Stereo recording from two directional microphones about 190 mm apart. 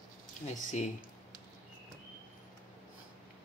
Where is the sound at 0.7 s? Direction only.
40° left (ahead or behind).